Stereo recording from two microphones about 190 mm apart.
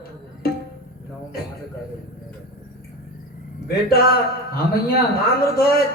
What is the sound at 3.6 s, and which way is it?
Speech, 55° left (ahead or behind).